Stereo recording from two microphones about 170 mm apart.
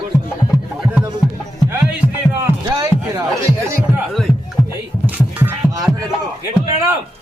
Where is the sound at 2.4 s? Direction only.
20° right (ahead or behind).